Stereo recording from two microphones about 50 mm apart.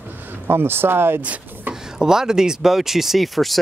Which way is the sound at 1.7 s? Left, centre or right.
Centre.